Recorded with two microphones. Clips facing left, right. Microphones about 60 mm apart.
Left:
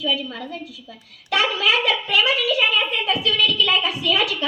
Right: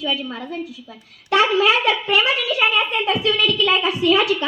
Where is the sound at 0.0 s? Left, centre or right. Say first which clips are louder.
Even; right.